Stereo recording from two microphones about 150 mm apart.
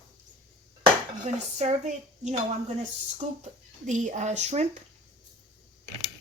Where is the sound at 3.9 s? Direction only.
55° right (ahead or behind).